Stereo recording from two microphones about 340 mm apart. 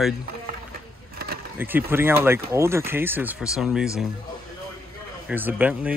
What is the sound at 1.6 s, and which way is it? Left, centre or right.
Speech, centre.